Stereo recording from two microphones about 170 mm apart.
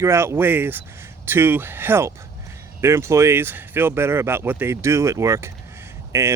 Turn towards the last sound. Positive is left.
turn(degrees=-15)  # may be behind; listen again after turning